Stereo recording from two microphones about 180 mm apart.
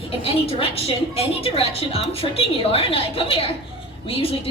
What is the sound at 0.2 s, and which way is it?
A woman's voice, 35° left (ahead or behind).